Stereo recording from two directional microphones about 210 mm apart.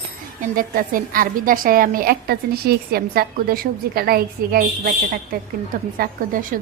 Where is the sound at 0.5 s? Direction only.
40° right (ahead or behind).